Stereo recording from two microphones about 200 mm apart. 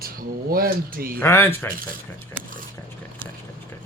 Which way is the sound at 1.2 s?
10° left (ahead or behind).